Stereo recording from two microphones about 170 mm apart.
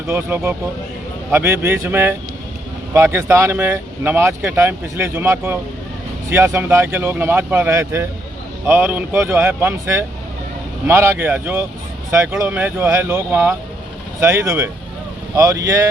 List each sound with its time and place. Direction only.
0.1 s speech: 15° right (ahead or behind)